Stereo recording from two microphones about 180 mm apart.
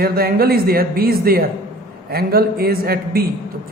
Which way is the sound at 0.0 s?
60° right (ahead or behind).